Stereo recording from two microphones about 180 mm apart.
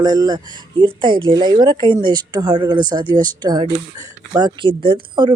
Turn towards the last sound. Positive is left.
turn(degrees=-25)  # may be behind; listen again after turning